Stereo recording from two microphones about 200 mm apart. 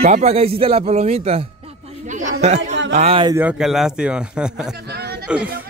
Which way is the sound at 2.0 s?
35° right (ahead or behind).